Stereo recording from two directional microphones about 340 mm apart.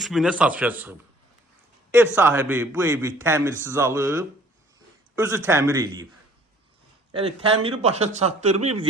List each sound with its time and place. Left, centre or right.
0.0 s a man's voice: centre
7.1 s speech: centre